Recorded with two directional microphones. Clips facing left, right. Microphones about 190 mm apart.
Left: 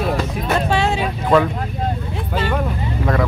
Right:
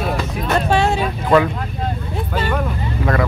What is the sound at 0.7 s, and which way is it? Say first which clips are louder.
Speech: right 4 dB; 45° right (ahead or behind).